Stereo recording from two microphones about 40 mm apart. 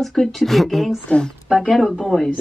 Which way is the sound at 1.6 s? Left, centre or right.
Centre.